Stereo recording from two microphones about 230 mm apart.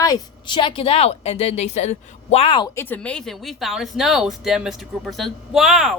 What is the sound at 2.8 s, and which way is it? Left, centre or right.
Speech, centre.